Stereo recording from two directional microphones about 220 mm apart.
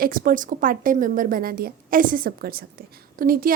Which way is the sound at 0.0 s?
40° right (ahead or behind).